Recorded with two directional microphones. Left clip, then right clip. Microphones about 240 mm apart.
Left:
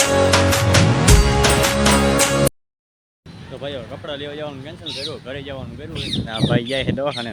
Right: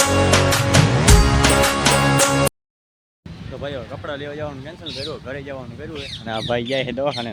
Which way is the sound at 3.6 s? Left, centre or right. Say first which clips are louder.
Even; centre.